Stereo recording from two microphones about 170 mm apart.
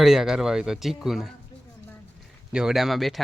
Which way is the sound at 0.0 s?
Centre (ahead or behind).